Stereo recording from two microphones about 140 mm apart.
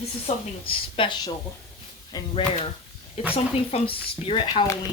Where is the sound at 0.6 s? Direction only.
40° left (ahead or behind).